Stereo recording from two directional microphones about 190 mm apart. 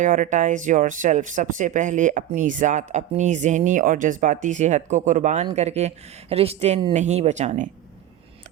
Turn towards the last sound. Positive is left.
turn(degrees=-40)  # may be behind; listen again after turning